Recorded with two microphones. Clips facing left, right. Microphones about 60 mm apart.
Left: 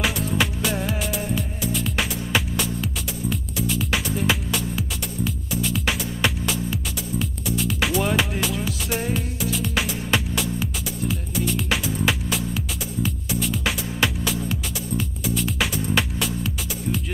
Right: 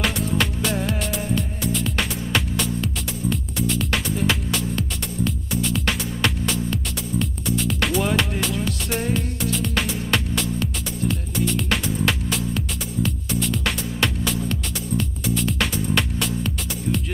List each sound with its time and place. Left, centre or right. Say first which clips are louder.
0.0 s music: even; centre